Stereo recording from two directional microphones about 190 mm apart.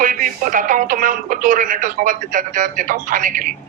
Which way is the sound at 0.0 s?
45° right (ahead or behind).